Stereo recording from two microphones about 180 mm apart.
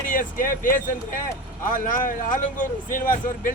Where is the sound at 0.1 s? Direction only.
50° left (ahead or behind).